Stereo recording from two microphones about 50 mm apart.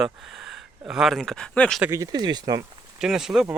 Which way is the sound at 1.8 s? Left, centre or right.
Right.